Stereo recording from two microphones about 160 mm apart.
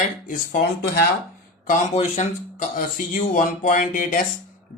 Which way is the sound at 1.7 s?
50° left (ahead or behind).